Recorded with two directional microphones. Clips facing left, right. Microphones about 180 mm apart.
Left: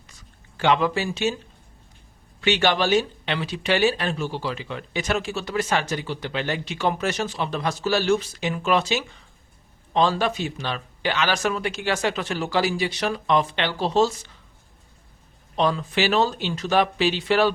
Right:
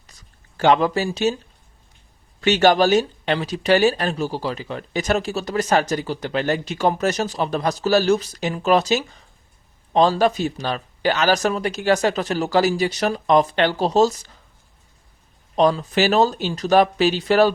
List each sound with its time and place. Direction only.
0.1 s a sound: 40° right (ahead or behind)
2.4 s speech: 40° right (ahead or behind)
15.5 s speech: 40° right (ahead or behind)